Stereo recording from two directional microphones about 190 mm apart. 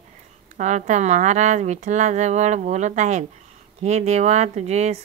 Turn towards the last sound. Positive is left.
turn(degrees=-35)  # may be behind; listen again after turning